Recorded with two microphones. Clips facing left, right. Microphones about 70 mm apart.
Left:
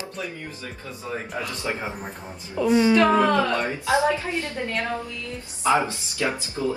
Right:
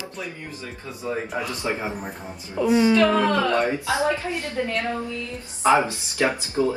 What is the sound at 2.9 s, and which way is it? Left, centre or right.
A woman's voice, left.